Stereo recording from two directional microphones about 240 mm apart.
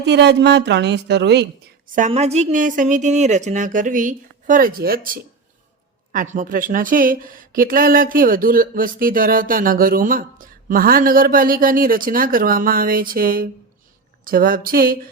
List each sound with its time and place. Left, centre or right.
0.0 s a woman's voice: right
2.0 s speech: right